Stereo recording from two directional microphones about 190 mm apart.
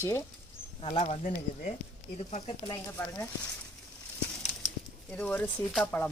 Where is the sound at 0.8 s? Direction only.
30° left (ahead or behind).